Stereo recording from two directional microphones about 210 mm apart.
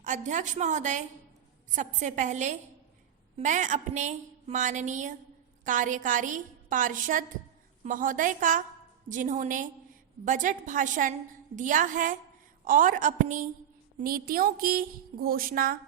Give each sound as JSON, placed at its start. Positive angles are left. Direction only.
{"t": 0.0, "sound": "a woman's voice", "side_deg": -35}